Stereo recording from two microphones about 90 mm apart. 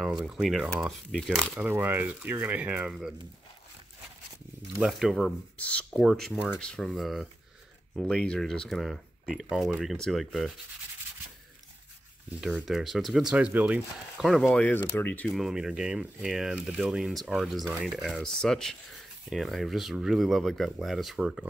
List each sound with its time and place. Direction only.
0.3 s speech: centre (ahead or behind)
1.6 s speech: 25° right (ahead or behind)
4.8 s speech: centre (ahead or behind)
5.9 s speech: centre (ahead or behind)
9.9 s speech: 5° left (ahead or behind)
12.6 s speech: centre (ahead or behind)
14.4 s speech: 20° left (ahead or behind)
15.3 s speech: 5° right (ahead or behind)